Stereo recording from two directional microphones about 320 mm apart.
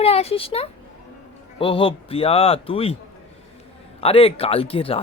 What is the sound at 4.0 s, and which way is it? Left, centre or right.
Speech, centre.